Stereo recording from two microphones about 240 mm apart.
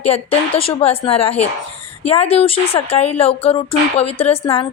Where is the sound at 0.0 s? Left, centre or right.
Left.